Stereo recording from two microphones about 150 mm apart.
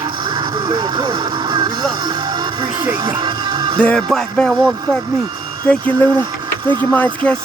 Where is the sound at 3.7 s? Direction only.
5° left (ahead or behind).